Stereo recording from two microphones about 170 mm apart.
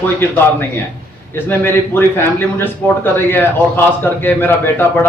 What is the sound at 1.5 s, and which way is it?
A man's voice, 10° left (ahead or behind).